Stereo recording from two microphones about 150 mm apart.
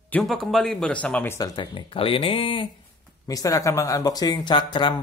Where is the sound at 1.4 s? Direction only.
35° left (ahead or behind).